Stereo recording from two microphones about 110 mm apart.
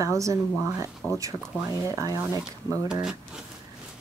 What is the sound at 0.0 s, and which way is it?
Speech, 30° right (ahead or behind).